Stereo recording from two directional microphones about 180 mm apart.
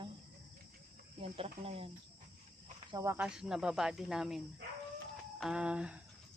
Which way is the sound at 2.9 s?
15° right (ahead or behind).